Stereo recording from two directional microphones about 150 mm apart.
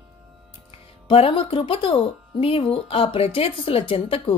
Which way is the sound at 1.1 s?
40° left (ahead or behind).